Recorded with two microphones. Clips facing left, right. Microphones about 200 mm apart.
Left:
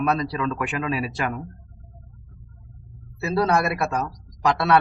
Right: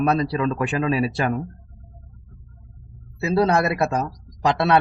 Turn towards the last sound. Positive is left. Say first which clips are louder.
# right 1 dB
turn(degrees=-25)  # may be behind; listen again after turning